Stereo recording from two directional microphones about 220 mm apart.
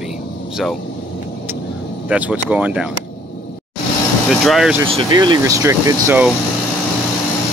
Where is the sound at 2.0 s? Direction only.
5° right (ahead or behind).